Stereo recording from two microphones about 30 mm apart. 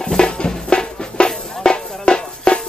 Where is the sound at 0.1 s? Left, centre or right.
Left.